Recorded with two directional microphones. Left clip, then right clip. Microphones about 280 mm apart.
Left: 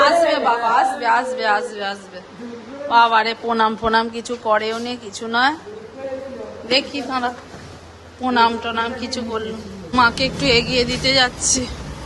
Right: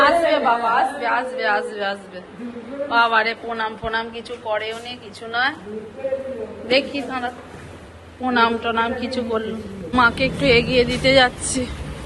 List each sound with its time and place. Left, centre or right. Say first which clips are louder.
0.0 s a woman's voice: left 1 dB; centre
6.7 s speech: even; centre